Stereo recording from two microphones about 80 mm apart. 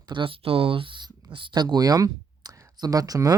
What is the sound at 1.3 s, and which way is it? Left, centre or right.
Speech, right.